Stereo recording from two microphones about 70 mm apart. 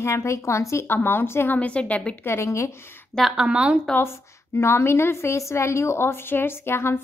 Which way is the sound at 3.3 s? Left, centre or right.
Centre.